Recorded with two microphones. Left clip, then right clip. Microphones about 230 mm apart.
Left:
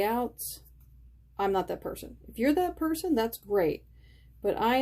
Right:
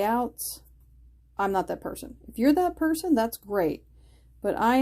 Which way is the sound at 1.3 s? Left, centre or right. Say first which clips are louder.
Right 2 dB; right.